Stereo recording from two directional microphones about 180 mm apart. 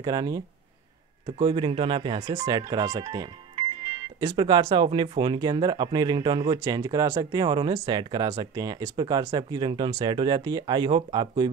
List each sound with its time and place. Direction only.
0.0 s speech: 20° right (ahead or behind)